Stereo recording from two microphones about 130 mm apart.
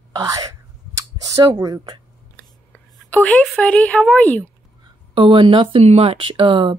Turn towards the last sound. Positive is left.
turn(degrees=-40)  # may be behind; listen again after turning